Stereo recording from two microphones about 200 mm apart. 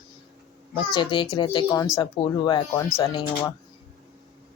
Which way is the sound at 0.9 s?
25° left (ahead or behind).